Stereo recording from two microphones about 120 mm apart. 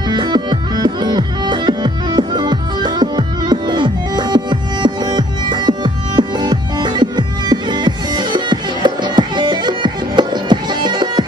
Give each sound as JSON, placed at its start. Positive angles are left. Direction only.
{"t": 0.1, "sound": "music", "side_deg": -35}